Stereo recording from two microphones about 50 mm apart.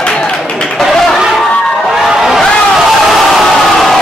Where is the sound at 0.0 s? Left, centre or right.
Centre.